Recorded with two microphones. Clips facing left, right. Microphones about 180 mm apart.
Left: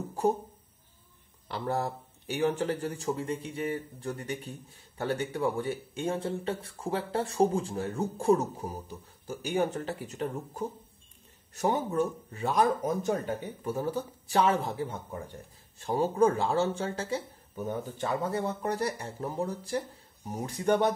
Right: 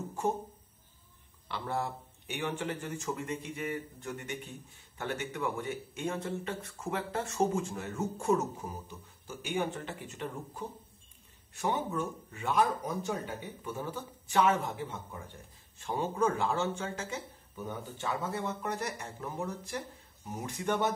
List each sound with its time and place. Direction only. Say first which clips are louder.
1.5 s speech: left 4 dB; 40° left (ahead or behind)